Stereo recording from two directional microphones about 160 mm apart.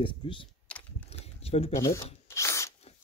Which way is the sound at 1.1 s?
40° left (ahead or behind).